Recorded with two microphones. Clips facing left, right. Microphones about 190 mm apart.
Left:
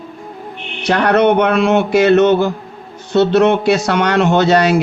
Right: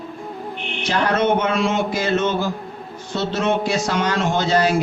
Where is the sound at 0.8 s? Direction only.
65° left (ahead or behind).